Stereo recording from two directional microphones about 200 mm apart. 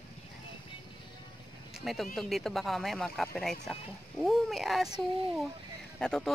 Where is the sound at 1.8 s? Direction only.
Centre (ahead or behind).